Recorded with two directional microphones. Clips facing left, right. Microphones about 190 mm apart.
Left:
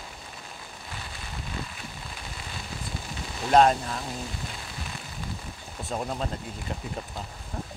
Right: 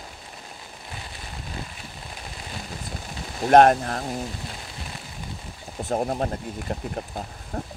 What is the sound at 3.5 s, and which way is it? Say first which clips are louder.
Speech: right 5 dB; 60° right (ahead or behind).